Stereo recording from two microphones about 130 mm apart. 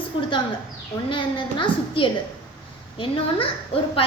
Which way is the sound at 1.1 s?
40° left (ahead or behind).